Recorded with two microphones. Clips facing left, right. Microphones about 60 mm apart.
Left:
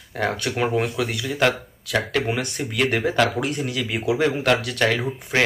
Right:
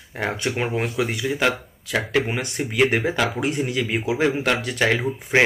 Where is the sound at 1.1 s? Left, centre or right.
Centre.